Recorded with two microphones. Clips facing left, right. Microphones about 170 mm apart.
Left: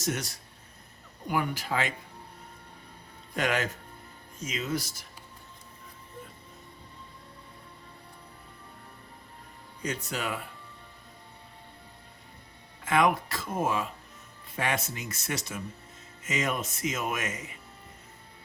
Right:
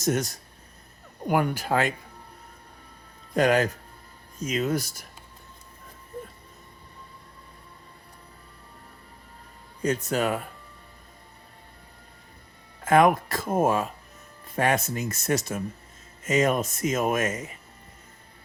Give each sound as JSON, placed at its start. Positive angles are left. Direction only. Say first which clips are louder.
{"t": 0.0, "sound": "speech", "louder": "right 7 dB", "side_deg": -45}
{"t": 3.3, "sound": "speech", "louder": "right 8 dB", "side_deg": -40}
{"t": 9.8, "sound": "speech", "louder": "right 8 dB", "side_deg": -45}
{"t": 12.8, "sound": "speech", "louder": "right 6 dB", "side_deg": -45}